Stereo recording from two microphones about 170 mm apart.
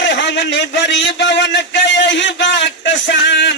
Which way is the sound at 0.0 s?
90° left.